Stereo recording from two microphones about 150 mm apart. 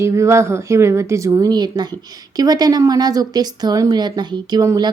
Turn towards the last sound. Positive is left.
turn(degrees=-25)  # may be behind; listen again after turning